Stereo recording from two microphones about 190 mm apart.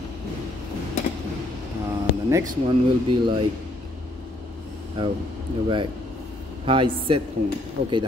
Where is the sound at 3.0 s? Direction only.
25° right (ahead or behind).